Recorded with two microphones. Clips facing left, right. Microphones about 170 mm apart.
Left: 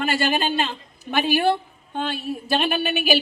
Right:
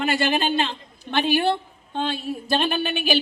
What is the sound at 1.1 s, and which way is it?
A woman's voice, 10° left (ahead or behind).